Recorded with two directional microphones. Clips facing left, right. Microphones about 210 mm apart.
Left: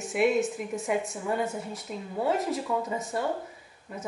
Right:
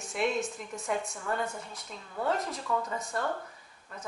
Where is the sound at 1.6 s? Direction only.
5° left (ahead or behind).